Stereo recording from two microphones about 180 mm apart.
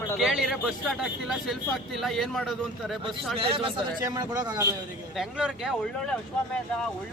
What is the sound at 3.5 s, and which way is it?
A man's voice, 25° right (ahead or behind).